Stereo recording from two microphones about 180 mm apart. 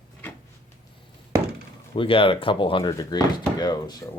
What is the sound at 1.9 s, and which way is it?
Speech, 30° left (ahead or behind).